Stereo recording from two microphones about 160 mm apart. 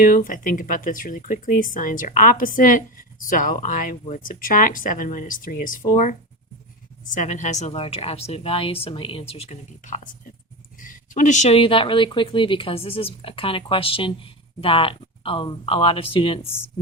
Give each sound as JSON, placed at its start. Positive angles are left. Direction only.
{"t": 0.0, "sound": "a woman's voice", "side_deg": 60}